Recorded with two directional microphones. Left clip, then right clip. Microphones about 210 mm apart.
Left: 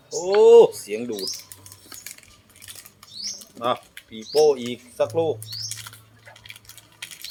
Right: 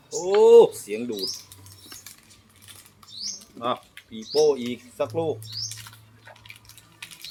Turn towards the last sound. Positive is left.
turn(degrees=30)  # may be behind; listen again after turning